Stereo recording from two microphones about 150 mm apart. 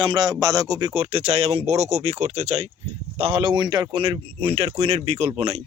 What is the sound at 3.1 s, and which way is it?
Speech, 35° right (ahead or behind).